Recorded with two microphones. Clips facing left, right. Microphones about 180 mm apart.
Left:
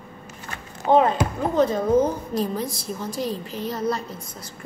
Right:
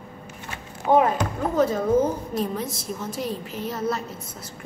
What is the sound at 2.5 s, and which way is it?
A woman's voice, 35° left (ahead or behind).